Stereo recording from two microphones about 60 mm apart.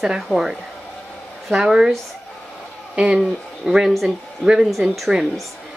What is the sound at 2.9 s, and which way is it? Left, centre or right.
Speech, centre.